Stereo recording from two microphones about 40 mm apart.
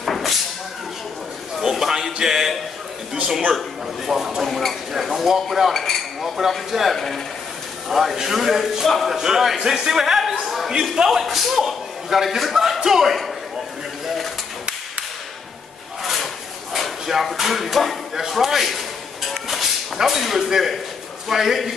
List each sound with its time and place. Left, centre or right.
0.0 s a sound: centre
1.6 s a sound: centre
3.5 s a man's voice: centre
5.5 s cutlery: centre
6.2 s a man's voice: centre
11.1 s a man's voice: centre
14.0 s pigeon: centre
16.0 s a sound: centre
17.2 s a man's voice: centre
19.4 s whip: centre
21.3 s a man's voice: centre